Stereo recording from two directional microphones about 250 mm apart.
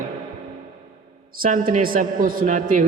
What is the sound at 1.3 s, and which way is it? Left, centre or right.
A man's voice, right.